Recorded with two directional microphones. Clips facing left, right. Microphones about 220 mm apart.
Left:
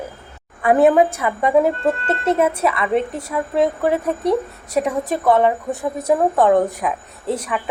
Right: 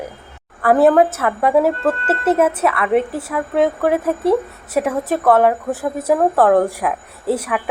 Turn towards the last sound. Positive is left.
turn(degrees=-5)  # may be behind; listen again after turning